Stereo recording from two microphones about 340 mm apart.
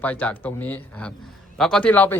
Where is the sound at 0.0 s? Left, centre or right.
Centre.